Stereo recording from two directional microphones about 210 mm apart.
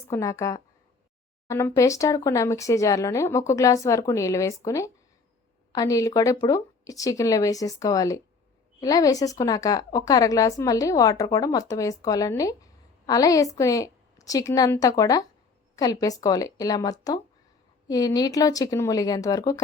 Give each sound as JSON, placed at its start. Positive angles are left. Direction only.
{"t": 0.1, "sound": "a woman's voice", "side_deg": 15}